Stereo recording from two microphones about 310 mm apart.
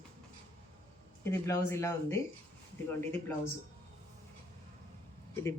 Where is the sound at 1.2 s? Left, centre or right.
Centre.